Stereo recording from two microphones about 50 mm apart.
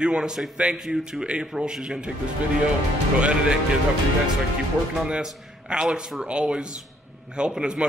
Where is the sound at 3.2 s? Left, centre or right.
Right.